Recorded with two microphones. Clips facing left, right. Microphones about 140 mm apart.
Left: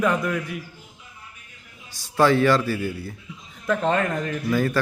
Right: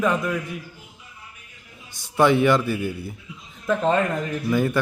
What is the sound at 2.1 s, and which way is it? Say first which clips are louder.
Speech: even; 20° right (ahead or behind).